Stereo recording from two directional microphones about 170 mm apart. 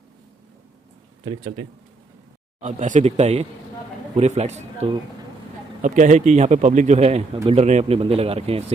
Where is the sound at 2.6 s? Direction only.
45° right (ahead or behind).